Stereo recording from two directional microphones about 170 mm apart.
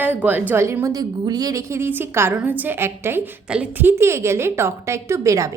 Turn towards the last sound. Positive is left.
turn(degrees=-20)  # may be behind; listen again after turning